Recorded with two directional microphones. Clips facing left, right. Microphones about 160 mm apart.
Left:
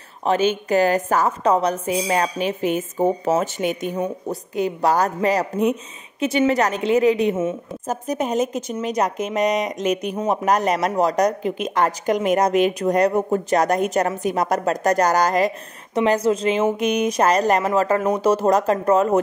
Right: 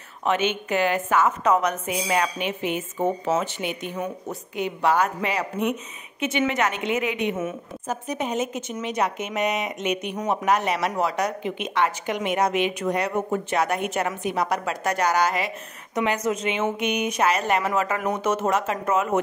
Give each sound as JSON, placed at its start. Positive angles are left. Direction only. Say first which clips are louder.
{"t": 0.2, "sound": "speech", "louder": "left 4 dB", "side_deg": 35}
{"t": 7.8, "sound": "speech", "louder": "left 4 dB", "side_deg": 40}